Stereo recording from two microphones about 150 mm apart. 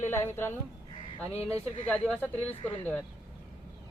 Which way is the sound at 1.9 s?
10° left (ahead or behind).